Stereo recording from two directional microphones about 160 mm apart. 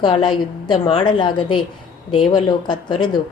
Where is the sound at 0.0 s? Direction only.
30° left (ahead or behind).